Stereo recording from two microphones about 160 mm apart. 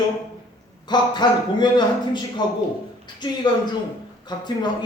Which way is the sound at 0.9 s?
25° left (ahead or behind).